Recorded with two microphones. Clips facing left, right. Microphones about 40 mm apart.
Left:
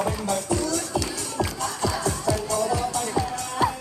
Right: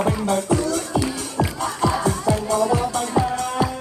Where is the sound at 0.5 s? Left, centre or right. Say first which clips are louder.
Right 4 dB; centre.